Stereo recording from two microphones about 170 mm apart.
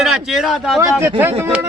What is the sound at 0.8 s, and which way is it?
Speech, 15° right (ahead or behind).